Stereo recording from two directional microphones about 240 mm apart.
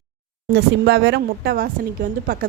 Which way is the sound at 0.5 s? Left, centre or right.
Right.